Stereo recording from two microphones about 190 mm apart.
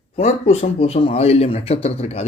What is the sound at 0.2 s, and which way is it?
Speech, 35° left (ahead or behind).